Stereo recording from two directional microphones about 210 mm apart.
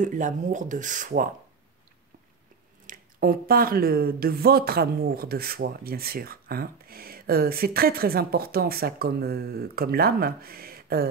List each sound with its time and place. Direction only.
0.0 s speech: 35° right (ahead or behind)
2.9 s speech: 45° right (ahead or behind)